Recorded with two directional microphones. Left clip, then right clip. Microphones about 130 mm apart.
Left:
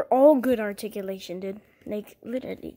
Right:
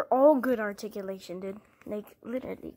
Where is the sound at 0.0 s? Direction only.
30° left (ahead or behind).